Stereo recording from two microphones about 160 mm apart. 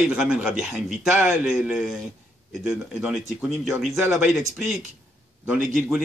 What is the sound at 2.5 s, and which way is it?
Speech, 5° right (ahead or behind).